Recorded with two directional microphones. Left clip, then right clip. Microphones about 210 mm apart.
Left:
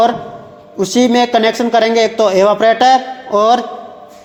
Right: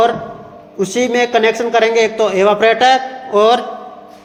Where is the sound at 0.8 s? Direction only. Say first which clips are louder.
Left 2 dB; 40° left (ahead or behind).